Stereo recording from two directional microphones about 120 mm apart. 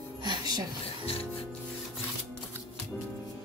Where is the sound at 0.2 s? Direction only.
35° right (ahead or behind).